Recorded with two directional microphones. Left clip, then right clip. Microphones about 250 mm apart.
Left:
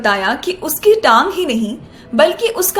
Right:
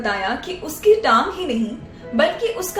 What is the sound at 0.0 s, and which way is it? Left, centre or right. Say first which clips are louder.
A woman's voice: left 7 dB; left.